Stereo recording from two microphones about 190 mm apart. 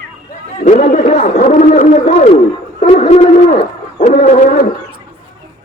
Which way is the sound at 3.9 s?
40° left (ahead or behind).